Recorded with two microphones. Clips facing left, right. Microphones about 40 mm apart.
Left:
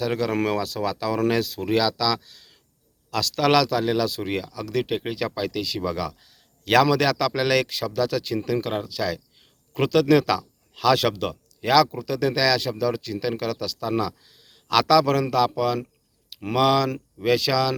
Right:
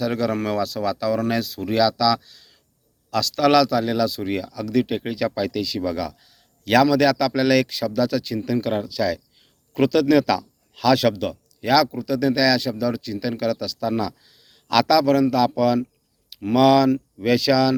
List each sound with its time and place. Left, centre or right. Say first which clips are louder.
0.0 s a man's voice: right 1 dB; left
3.1 s speech: right 3 dB; left
5.4 s a man's voice: right 3 dB; left
14.3 s a sound: right 1 dB; left
15.0 s a man's voice: right 3 dB; left
15.4 s speech: right 4 dB; left